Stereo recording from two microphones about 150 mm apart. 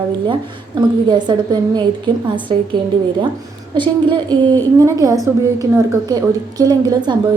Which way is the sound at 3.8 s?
30° right (ahead or behind).